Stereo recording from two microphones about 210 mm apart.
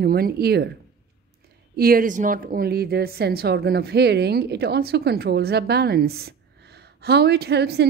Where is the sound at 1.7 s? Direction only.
45° right (ahead or behind).